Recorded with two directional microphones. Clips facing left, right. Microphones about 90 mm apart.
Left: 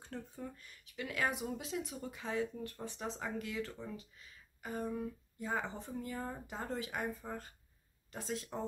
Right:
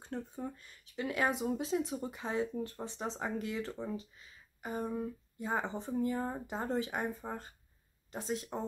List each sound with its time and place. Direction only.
0.0 s speech: 25° right (ahead or behind)